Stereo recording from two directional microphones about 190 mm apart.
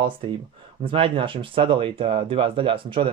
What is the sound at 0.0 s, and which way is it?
Speech, 25° right (ahead or behind).